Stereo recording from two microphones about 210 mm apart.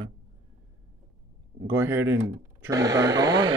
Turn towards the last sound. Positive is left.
turn(degrees=-20)  # may be behind; listen again after turning